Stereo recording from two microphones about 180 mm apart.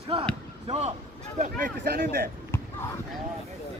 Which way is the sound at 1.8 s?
55° right (ahead or behind).